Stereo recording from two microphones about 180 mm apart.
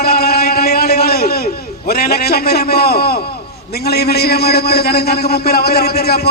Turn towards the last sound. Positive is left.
turn(degrees=60)  # may be behind; listen again after turning